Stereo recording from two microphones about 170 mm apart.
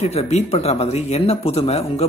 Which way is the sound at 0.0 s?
40° left (ahead or behind).